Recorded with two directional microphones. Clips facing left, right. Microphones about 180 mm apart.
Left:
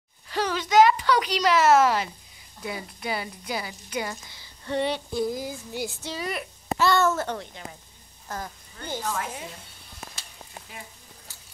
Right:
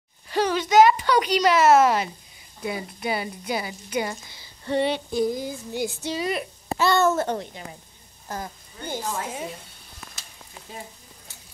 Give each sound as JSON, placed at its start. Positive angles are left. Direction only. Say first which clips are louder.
{"t": 0.3, "sound": "a sound", "louder": "right 3 dB", "side_deg": -20}
{"t": 2.6, "sound": "speech", "louder": "right 4 dB", "side_deg": -20}
{"t": 5.3, "sound": "a sound", "louder": "right 3 dB", "side_deg": 5}
{"t": 6.0, "sound": "speech", "louder": "right 5 dB", "side_deg": -20}
{"t": 8.3, "sound": "a woman's voice", "louder": "right 2 dB", "side_deg": -10}
{"t": 9.1, "sound": "speech", "louder": "right 2 dB", "side_deg": -25}